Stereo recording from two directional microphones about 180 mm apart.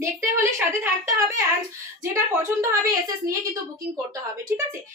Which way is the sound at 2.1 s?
15° right (ahead or behind).